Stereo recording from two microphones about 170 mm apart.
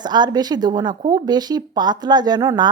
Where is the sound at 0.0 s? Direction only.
25° right (ahead or behind).